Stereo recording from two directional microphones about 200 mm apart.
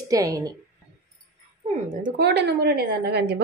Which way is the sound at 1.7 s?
40° right (ahead or behind).